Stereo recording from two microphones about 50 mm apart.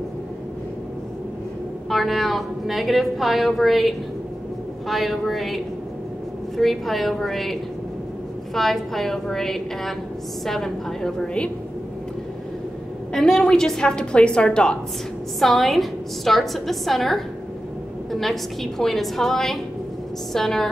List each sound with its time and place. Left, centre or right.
1.9 s a woman's voice: centre
8.5 s a woman's voice: centre
13.1 s a woman's voice: centre
15.4 s a woman's voice: centre